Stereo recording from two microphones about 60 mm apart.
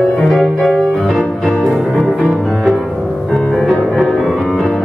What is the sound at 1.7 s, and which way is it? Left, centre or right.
Music, centre.